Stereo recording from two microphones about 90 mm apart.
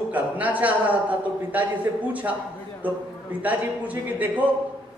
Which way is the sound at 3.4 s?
15° right (ahead or behind).